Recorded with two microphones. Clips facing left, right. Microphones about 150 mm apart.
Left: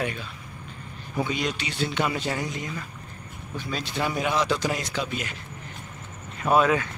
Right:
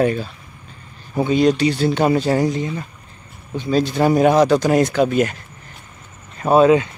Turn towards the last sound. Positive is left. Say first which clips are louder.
# right 8 dB
turn(degrees=-25)  # may be behind; listen again after turning